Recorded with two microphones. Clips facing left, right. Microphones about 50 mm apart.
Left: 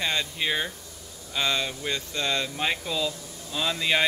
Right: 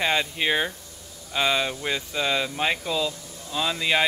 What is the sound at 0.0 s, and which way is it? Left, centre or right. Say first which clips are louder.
Speech: right 4 dB; centre.